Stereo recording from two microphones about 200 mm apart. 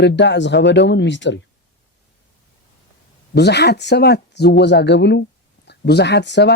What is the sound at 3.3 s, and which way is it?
Speech, 55° left (ahead or behind).